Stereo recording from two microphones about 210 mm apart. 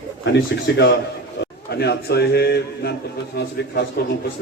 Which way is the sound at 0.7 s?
55° left (ahead or behind).